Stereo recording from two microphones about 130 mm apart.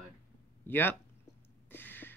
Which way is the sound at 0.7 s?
15° left (ahead or behind).